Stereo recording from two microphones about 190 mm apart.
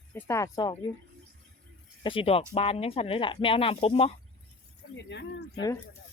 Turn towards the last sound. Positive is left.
turn(degrees=65)  # may be behind; listen again after turning